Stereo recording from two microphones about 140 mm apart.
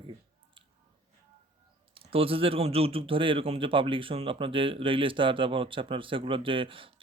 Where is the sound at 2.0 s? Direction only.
40° right (ahead or behind).